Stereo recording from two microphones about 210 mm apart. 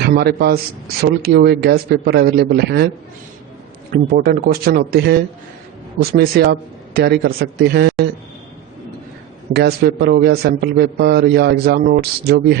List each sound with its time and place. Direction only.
0.0 s a man's voice: 50° right (ahead or behind)
3.9 s a man's voice: 50° right (ahead or behind)
9.5 s a man's voice: 50° right (ahead or behind)